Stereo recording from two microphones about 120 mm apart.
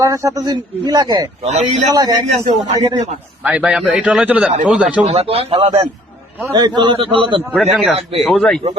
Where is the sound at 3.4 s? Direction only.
10° right (ahead or behind).